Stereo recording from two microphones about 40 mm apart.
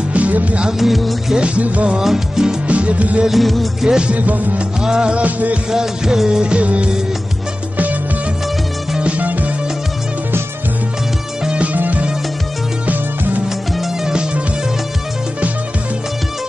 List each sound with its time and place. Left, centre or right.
0.1 s music: right
0.7 s music: centre
1.3 s music: right
2.0 s music of bollywood: centre
2.7 s music: right
3.3 s music: centre
3.8 s music of bollywood: centre
4.1 s music: right
4.8 s music: centre
5.1 s music: right
5.7 s music of bollywood: centre; by 6.9 s right
9.0 s music: right
11.6 s music: right
14.0 s music: right